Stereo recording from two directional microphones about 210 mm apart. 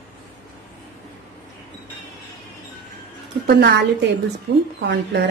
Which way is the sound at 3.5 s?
50° right (ahead or behind).